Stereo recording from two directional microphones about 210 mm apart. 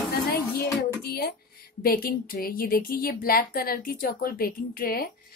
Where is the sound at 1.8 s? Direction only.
45° left (ahead or behind).